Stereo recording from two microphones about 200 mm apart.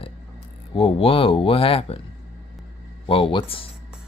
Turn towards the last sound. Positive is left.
turn(degrees=25)  # may be behind; listen again after turning